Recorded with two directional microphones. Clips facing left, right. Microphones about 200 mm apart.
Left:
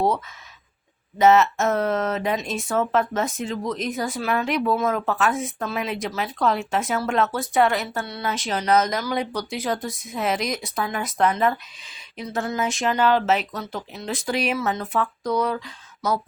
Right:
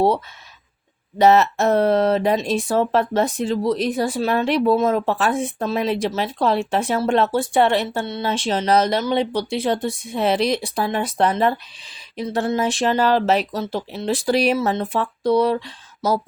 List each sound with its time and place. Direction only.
1.2 s speech: 35° right (ahead or behind)